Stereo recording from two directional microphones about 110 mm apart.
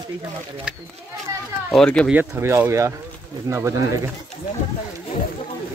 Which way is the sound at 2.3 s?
20° right (ahead or behind).